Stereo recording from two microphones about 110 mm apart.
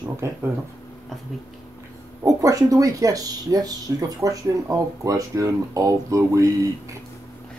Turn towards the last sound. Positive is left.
turn(degrees=-30)  # may be behind; listen again after turning